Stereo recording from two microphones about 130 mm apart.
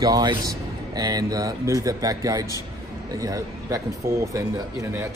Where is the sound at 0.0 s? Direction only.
30° right (ahead or behind).